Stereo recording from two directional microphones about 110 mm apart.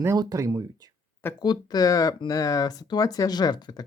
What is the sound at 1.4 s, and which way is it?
Speech, 40° left (ahead or behind).